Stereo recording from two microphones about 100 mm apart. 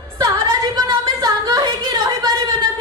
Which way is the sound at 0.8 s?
45° right (ahead or behind).